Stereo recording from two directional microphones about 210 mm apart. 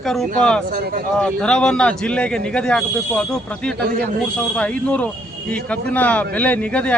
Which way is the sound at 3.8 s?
45° right (ahead or behind).